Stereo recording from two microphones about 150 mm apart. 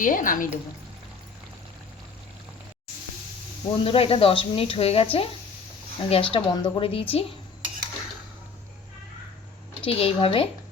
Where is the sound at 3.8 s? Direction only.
40° left (ahead or behind).